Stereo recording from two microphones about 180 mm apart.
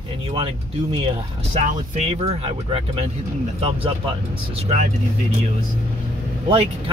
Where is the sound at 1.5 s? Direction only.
35° right (ahead or behind).